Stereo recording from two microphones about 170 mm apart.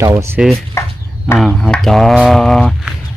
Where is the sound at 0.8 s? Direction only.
15° left (ahead or behind).